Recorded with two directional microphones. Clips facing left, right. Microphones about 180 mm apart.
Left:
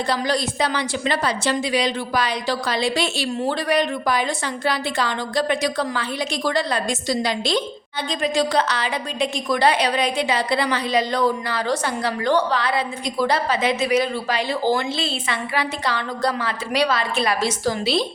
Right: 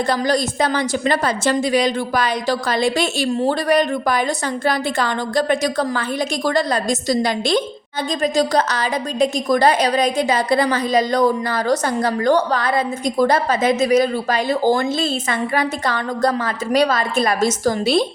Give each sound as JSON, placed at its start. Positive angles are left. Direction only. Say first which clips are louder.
{"t": 0.1, "sound": "a woman's voice", "louder": "right 4 dB", "side_deg": -45}